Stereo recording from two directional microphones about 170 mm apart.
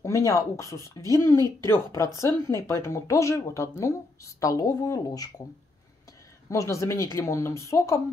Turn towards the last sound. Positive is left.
turn(degrees=20)  # may be behind; listen again after turning